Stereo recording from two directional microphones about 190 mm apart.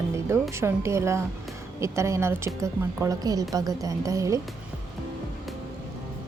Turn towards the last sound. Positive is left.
turn(degrees=-15)  # may be behind; listen again after turning